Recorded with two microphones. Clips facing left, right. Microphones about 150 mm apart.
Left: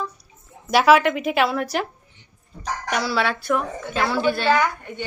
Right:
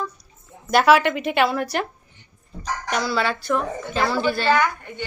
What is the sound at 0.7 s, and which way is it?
A woman's voice, centre (ahead or behind).